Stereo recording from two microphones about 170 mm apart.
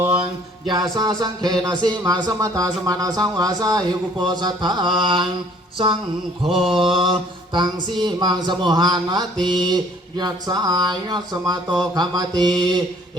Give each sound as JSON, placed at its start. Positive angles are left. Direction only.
{"t": 0.7, "sound": "speech", "side_deg": -25}
{"t": 6.4, "sound": "mantra", "side_deg": -30}
{"t": 6.7, "sound": "speech", "side_deg": -30}